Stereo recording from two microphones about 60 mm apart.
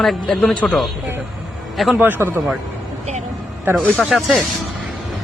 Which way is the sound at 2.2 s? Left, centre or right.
Right.